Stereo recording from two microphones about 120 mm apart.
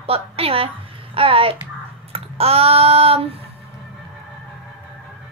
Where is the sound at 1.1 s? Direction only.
50° right (ahead or behind).